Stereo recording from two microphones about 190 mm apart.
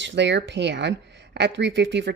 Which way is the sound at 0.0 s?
70° right (ahead or behind).